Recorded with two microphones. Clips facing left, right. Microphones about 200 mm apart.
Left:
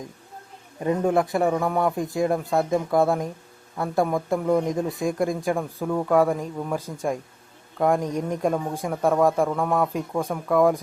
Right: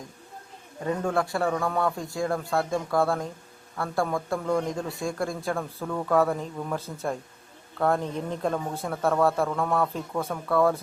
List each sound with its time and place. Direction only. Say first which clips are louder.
0.8 s a man's voice: left 5 dB; 20° left (ahead or behind)